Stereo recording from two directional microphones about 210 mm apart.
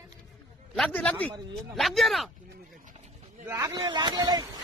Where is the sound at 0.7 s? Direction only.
5° left (ahead or behind).